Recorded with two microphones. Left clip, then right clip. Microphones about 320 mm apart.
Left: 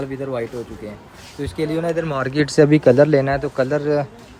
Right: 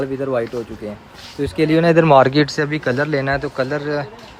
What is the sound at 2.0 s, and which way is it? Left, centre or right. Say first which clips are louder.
A man's voice: right 10 dB; centre.